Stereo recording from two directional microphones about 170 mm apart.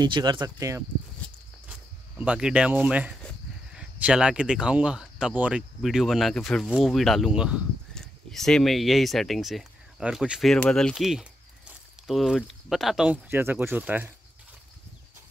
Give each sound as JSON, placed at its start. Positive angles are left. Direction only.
{"t": 0.0, "sound": "speech", "side_deg": -25}
{"t": 2.1, "sound": "speech", "side_deg": -5}